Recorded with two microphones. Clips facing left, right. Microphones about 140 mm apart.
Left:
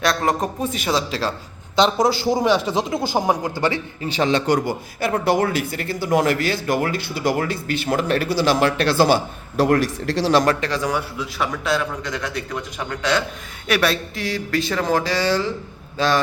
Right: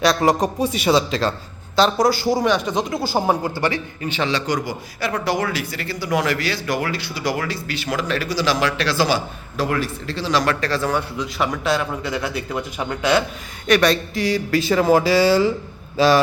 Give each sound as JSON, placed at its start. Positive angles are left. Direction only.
{"t": 0.0, "sound": "speech", "side_deg": 0}
{"t": 1.7, "sound": "speech", "side_deg": 20}
{"t": 4.1, "sound": "speech", "side_deg": 45}
{"t": 10.6, "sound": "a man's voice", "side_deg": 15}
{"t": 11.3, "sound": "a man's voice", "side_deg": 0}
{"t": 13.7, "sound": "a man's voice", "side_deg": 5}